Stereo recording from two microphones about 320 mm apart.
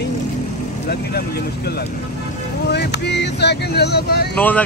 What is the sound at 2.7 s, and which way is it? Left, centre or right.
Speech, left.